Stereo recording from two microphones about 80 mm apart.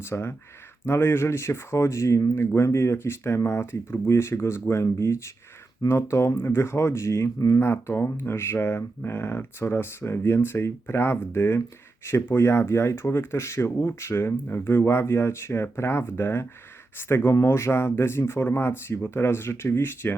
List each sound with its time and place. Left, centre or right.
0.0 s speech: left